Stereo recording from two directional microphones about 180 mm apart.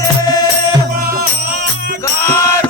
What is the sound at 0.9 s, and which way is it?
Music, 55° right (ahead or behind).